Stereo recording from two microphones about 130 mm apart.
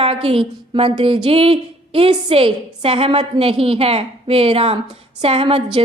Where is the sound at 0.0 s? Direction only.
50° right (ahead or behind).